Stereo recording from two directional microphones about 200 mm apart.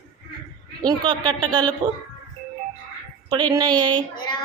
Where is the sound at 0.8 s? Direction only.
20° right (ahead or behind).